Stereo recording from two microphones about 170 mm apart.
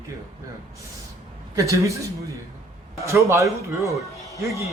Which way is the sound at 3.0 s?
15° right (ahead or behind).